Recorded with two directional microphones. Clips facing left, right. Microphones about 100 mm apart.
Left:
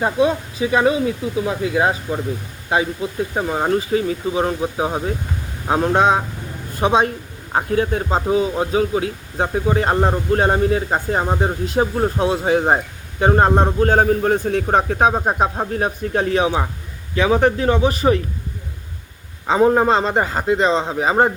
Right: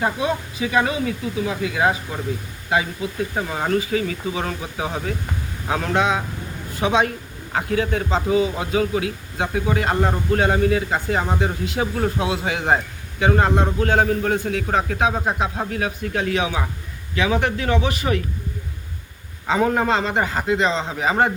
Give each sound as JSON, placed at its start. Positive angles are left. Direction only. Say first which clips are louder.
{"t": 0.0, "sound": "a man's voice", "louder": "left 5 dB", "side_deg": 25}
{"t": 7.5, "sound": "a man's voice", "louder": "left 3 dB", "side_deg": 30}
{"t": 19.5, "sound": "a man's voice", "louder": "left 5 dB", "side_deg": 30}